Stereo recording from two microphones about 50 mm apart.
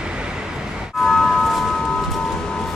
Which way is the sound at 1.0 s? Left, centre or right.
Centre.